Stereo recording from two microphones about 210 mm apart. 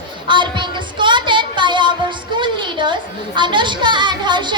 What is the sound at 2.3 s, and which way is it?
A woman's voice, 20° right (ahead or behind).